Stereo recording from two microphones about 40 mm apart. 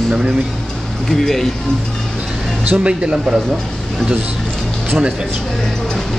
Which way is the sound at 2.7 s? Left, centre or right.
Right.